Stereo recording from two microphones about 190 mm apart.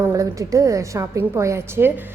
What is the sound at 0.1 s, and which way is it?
A woman's voice, 15° right (ahead or behind).